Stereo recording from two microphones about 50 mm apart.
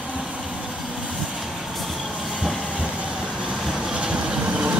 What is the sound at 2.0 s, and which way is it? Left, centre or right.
Vehicle, centre.